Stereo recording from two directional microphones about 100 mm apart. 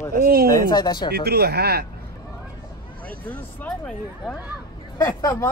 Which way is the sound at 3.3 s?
15° left (ahead or behind).